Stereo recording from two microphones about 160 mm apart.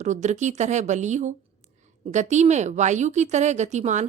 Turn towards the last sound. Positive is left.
turn(degrees=-45)  # may be behind; listen again after turning